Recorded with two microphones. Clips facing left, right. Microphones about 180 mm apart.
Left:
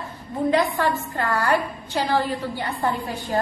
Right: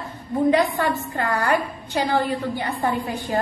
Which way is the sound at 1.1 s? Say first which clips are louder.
Even; 15° right (ahead or behind).